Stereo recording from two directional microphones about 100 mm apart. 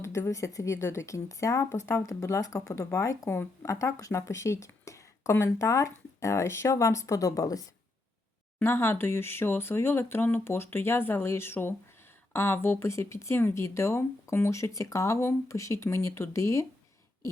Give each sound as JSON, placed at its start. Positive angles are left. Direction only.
{"t": 0.0, "sound": "speech", "side_deg": 30}
{"t": 8.5, "sound": "speech", "side_deg": 25}